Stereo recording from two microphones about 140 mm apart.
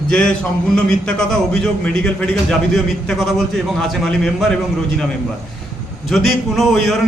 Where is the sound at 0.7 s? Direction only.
5° left (ahead or behind).